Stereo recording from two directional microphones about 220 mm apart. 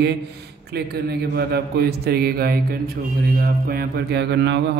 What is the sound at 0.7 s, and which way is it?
Speech, 45° right (ahead or behind).